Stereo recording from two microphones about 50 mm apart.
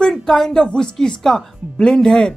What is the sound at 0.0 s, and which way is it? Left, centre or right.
A woman's voice, centre.